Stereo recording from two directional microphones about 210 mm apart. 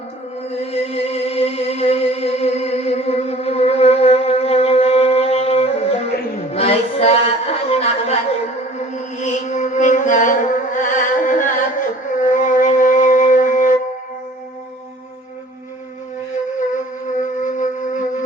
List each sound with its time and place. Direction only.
0.6 s music: 30° left (ahead or behind)
6.5 s a sound: 30° left (ahead or behind)
9.1 s music: 35° left (ahead or behind)